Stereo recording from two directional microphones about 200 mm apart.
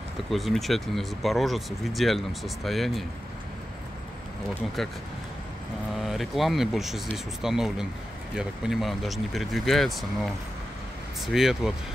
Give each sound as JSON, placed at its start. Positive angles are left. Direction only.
{"t": 0.3, "sound": "speech", "side_deg": 0}
{"t": 4.8, "sound": "speech", "side_deg": 0}
{"t": 6.0, "sound": "speech", "side_deg": 0}